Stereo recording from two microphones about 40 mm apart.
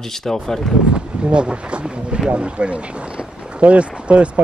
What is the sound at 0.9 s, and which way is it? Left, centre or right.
Speech, right.